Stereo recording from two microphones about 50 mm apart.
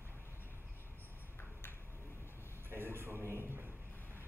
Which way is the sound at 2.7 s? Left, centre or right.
Right.